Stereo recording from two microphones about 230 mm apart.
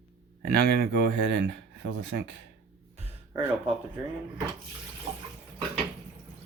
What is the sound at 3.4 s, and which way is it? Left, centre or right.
Speech, centre.